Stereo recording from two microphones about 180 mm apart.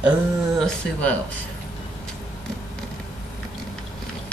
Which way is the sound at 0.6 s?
5° left (ahead or behind).